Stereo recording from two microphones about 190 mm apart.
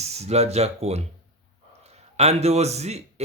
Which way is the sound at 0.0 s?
35° right (ahead or behind).